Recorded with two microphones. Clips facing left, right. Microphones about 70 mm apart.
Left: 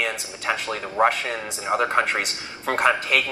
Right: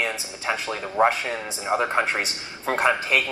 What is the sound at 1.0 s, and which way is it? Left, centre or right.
Speech, left.